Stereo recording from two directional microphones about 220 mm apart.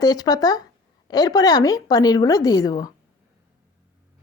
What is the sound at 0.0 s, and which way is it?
Speech, 15° left (ahead or behind).